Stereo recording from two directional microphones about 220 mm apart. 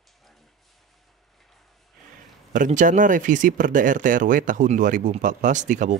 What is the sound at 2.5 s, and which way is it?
Speech, 35° right (ahead or behind).